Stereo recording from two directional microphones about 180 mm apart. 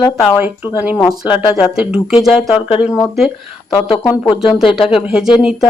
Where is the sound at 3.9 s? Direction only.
25° left (ahead or behind).